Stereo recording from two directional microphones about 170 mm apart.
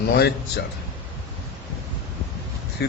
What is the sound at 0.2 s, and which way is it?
Speech, 75° left (ahead or behind).